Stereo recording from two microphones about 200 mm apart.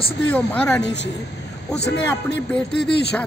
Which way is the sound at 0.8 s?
60° left (ahead or behind).